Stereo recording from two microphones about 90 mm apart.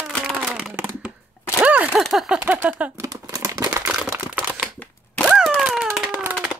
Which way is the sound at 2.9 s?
40° right (ahead or behind).